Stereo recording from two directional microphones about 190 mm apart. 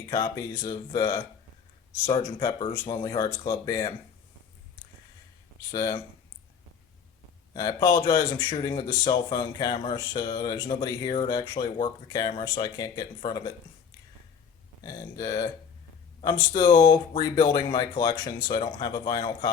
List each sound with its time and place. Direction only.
0.1 s speech: 20° left (ahead or behind)
5.7 s speech: 20° left (ahead or behind)
7.5 s speech: 20° left (ahead or behind)
14.8 s speech: 20° left (ahead or behind)